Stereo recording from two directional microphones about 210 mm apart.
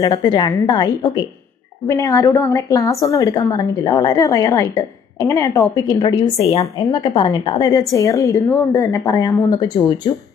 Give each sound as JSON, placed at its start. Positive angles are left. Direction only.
{"t": 0.0, "sound": "a woman's voice", "side_deg": 20}